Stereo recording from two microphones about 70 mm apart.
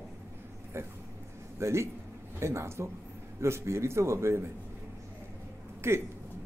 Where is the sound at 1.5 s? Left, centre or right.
Right.